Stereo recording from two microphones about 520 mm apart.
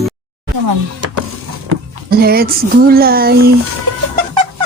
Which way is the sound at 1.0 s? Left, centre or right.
Right.